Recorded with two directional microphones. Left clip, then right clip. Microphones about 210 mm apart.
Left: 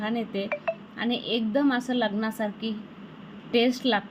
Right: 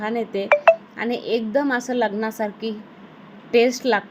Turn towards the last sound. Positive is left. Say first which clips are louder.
# right 6 dB
turn(degrees=-15)  # may be behind; listen again after turning